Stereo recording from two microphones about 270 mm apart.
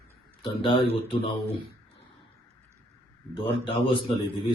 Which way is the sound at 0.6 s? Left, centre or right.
Centre.